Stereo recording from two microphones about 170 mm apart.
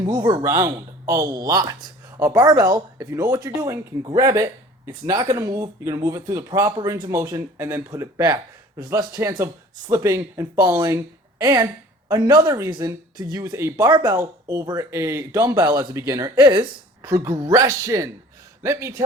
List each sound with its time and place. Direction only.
0.0 s speech: 25° right (ahead or behind)